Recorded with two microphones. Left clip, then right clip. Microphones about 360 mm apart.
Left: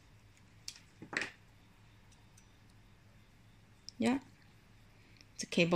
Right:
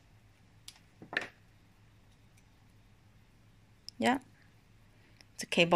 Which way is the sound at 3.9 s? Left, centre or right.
Right.